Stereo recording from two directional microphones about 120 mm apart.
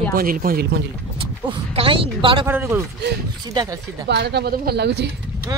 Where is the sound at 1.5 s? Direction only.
50° right (ahead or behind).